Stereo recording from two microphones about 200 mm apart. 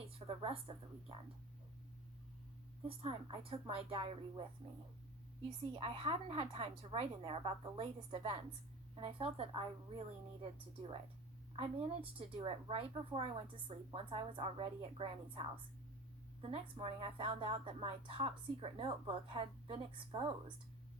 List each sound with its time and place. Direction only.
0.0 s a sound: 30° right (ahead or behind)
2.8 s a woman's voice: 25° right (ahead or behind)
5.7 s a woman's voice: 25° right (ahead or behind)